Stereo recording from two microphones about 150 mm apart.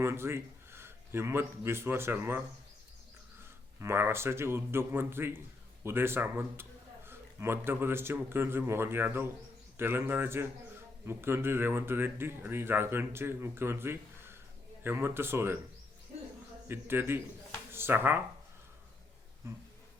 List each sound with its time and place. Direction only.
0.0 s speech: 15° right (ahead or behind)
3.8 s a man's voice: 15° right (ahead or behind)
16.6 s speech: 15° right (ahead or behind)
19.4 s speech: 20° right (ahead or behind)